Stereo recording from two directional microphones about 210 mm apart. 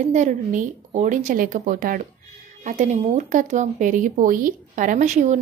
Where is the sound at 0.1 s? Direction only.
35° right (ahead or behind).